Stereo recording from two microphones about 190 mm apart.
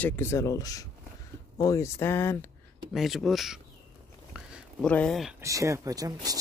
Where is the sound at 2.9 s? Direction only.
Centre (ahead or behind).